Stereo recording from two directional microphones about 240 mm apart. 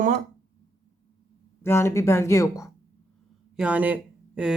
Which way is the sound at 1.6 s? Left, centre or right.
Centre.